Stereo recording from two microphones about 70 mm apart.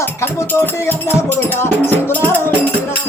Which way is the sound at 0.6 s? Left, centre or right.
Left.